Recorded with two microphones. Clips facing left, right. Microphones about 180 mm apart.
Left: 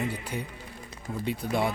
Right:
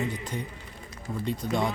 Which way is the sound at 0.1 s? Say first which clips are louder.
Even; 10° left (ahead or behind).